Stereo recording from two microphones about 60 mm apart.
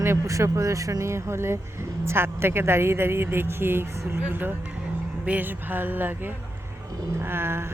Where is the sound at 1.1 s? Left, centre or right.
Right.